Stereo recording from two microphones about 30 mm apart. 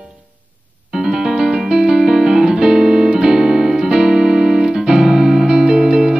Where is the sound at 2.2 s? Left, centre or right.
Centre.